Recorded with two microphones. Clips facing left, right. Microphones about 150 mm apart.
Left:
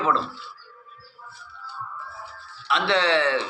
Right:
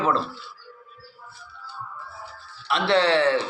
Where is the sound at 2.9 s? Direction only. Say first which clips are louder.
Right 3 dB; 35° right (ahead or behind).